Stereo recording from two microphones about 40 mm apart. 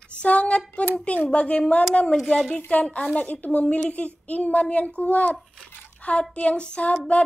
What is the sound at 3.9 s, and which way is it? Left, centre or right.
A child's voice, left.